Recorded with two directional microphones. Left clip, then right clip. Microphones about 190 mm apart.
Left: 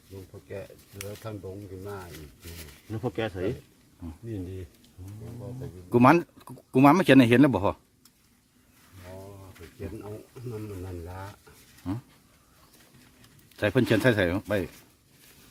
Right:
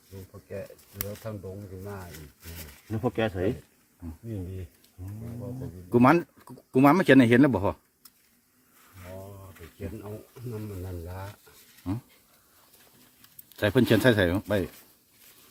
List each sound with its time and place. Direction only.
1.2 s speech: 15° left (ahead or behind)
2.0 s speech: 5° right (ahead or behind)
2.9 s speech: 40° right (ahead or behind)
5.9 s speech: 15° left (ahead or behind)
9.0 s a sound: centre (ahead or behind)
10.5 s speech: 5° left (ahead or behind)
13.6 s speech: 5° right (ahead or behind)